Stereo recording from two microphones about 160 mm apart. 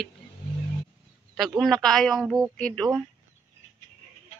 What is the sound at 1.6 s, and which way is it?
Speech, 5° left (ahead or behind).